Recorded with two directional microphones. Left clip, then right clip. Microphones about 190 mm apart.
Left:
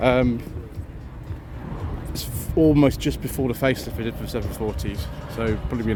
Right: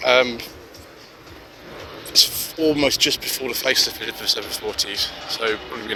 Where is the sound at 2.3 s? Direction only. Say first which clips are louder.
Left 2 dB; 15° left (ahead or behind).